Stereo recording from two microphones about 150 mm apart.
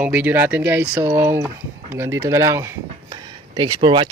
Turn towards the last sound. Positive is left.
turn(degrees=-35)  # may be behind; listen again after turning